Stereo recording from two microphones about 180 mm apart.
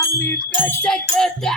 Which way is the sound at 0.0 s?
10° left (ahead or behind).